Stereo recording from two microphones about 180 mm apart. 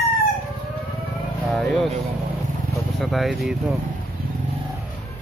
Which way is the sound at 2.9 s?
Centre (ahead or behind).